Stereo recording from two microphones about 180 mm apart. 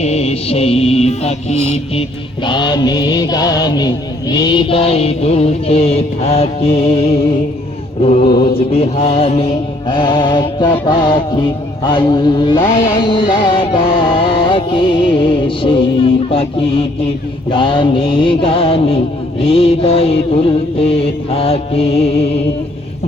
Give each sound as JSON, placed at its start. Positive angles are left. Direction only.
{"t": 0.0, "sound": "mantra", "side_deg": 35}
{"t": 2.0, "sound": "mantra", "side_deg": 25}
{"t": 12.8, "sound": "music", "side_deg": 25}
{"t": 17.5, "sound": "mantra", "side_deg": 30}